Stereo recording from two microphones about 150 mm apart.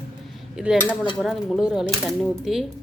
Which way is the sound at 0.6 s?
5° right (ahead or behind).